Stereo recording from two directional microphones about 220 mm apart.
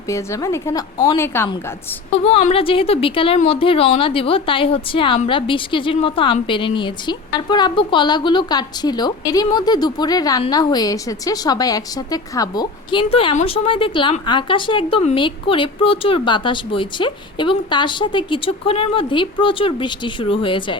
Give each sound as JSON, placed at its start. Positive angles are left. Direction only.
{"t": 0.1, "sound": "a woman's voice", "side_deg": 15}
{"t": 2.2, "sound": "a woman's voice", "side_deg": 25}